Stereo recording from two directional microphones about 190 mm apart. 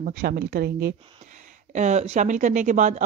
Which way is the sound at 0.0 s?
45° right (ahead or behind).